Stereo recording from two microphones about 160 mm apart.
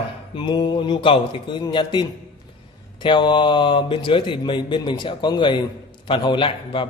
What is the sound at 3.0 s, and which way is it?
Speech, 30° left (ahead or behind).